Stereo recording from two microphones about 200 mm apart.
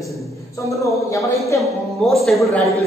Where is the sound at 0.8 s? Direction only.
15° left (ahead or behind).